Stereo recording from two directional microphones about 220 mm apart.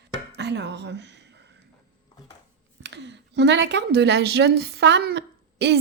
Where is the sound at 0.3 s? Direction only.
50° right (ahead or behind).